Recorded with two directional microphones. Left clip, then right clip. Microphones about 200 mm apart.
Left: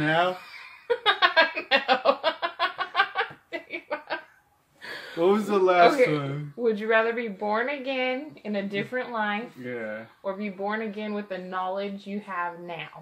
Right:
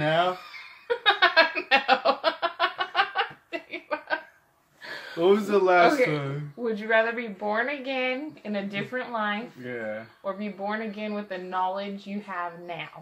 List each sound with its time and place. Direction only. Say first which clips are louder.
0.8 s a sound: right 1 dB; 15° left (ahead or behind)
5.1 s speech: right 1 dB; 10° right (ahead or behind)
5.8 s speech: left 1 dB; 30° left (ahead or behind)
9.7 s speech: right 1 dB; 15° right (ahead or behind)
10.2 s speech: left 1 dB; 15° left (ahead or behind)